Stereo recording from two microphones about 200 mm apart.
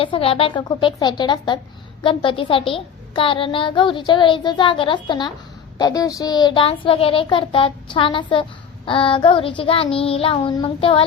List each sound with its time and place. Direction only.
0.0 s a child's voice: 25° left (ahead or behind)